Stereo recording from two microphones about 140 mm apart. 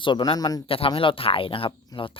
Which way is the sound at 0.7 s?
40° left (ahead or behind).